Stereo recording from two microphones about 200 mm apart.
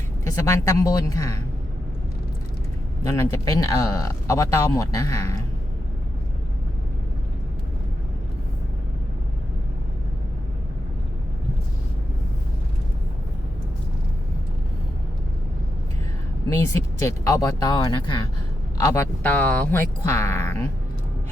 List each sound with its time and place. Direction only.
0.3 s speech: 15° left (ahead or behind)
3.0 s speech: 15° left (ahead or behind)
16.6 s speech: 15° left (ahead or behind)